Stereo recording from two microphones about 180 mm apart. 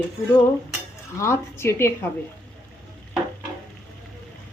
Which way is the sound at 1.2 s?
15° left (ahead or behind).